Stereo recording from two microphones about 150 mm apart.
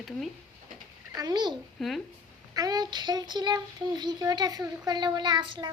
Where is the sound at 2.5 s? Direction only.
25° right (ahead or behind).